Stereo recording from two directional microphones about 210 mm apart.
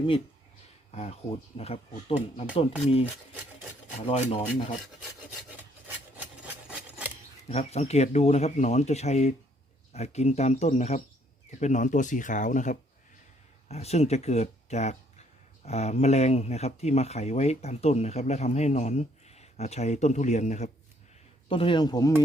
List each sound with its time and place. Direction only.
0.9 s speech: 30° left (ahead or behind)
4.0 s speech: 30° left (ahead or behind)
6.7 s scissors: 5° right (ahead or behind)
7.5 s speech: 30° left (ahead or behind)